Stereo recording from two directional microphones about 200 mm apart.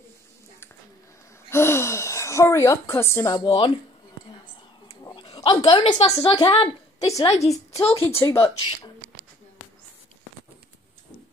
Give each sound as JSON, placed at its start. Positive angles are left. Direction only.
{"t": 1.5, "sound": "speech", "side_deg": 10}
{"t": 5.0, "sound": "a sound", "side_deg": 25}
{"t": 6.4, "sound": "a woman's voice", "side_deg": 25}
{"t": 8.2, "sound": "speech", "side_deg": 15}